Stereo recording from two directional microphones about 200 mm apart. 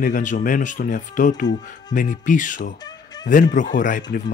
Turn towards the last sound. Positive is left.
turn(degrees=40)  # may be behind; listen again after turning